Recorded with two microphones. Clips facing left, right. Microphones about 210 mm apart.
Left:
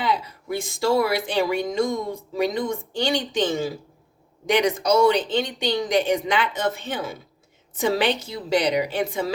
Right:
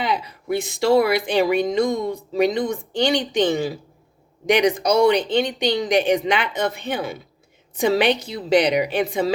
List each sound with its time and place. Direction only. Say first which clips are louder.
0.0 s a sound: right 1 dB; 15° right (ahead or behind)
0.5 s speech: right 4 dB; 70° right (ahead or behind)
1.0 s a woman's voice: right 4 dB; 15° right (ahead or behind)